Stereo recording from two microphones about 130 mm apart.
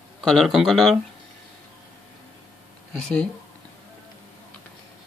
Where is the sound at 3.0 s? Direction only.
5° left (ahead or behind).